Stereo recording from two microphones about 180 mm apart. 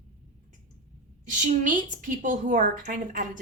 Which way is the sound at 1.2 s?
45° right (ahead or behind).